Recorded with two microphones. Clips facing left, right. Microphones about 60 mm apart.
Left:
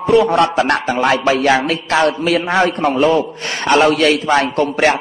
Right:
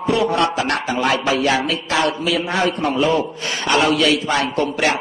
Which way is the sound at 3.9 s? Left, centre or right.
Left.